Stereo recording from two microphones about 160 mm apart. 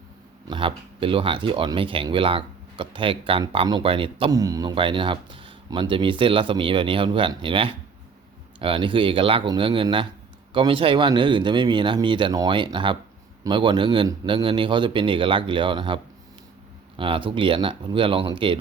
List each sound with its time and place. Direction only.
0.4 s speech: 30° right (ahead or behind)
4.3 s speech: 20° right (ahead or behind)
17.0 s speech: 30° right (ahead or behind)